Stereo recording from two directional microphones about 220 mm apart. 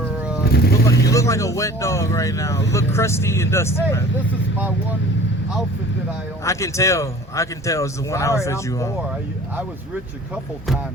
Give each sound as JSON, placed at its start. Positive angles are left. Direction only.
{"t": 0.5, "sound": "speech", "side_deg": 45}
{"t": 1.0, "sound": "a man's voice", "side_deg": 15}
{"t": 6.4, "sound": "a man's voice", "side_deg": 15}